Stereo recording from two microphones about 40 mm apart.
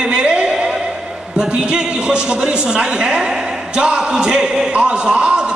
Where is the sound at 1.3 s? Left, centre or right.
Right.